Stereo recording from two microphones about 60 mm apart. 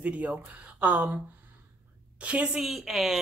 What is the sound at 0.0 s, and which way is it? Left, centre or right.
Speech, right.